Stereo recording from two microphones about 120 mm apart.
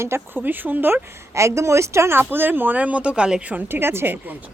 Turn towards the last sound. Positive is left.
turn(degrees=-20)  # may be behind; listen again after turning